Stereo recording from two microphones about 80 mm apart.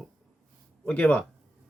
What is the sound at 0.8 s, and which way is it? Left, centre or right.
Speech, left.